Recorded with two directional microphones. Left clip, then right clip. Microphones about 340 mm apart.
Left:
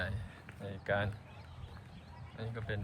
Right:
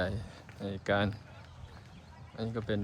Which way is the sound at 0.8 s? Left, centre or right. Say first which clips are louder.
Right 4 dB; centre.